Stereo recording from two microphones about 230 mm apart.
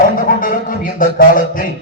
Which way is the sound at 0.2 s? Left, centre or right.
Left.